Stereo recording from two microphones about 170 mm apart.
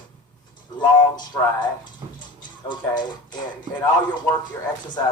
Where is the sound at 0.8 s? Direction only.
25° left (ahead or behind).